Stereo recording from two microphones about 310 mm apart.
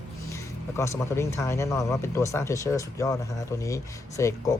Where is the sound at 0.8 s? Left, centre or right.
Centre.